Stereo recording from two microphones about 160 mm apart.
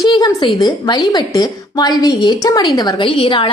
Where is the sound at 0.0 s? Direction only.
25° left (ahead or behind).